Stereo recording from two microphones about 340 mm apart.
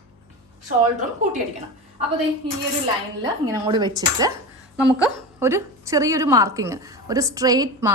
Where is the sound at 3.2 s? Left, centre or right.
Centre.